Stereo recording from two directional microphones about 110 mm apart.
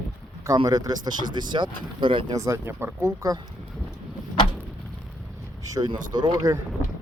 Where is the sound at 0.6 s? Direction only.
35° right (ahead or behind).